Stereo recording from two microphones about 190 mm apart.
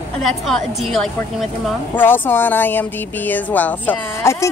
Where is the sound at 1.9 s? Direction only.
10° left (ahead or behind).